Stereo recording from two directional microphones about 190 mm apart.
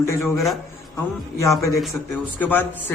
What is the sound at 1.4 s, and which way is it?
A man's voice, 15° left (ahead or behind).